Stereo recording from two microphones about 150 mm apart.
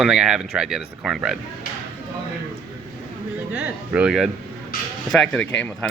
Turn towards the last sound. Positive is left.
turn(degrees=10)  # may be behind; listen again after turning